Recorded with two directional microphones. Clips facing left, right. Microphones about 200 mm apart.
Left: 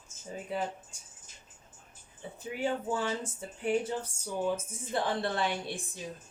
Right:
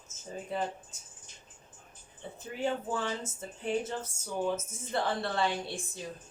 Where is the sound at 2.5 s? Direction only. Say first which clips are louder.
Left 1 dB; 10° left (ahead or behind).